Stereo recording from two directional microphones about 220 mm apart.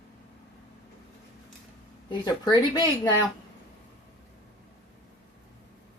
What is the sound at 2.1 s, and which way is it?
Speech, 20° left (ahead or behind).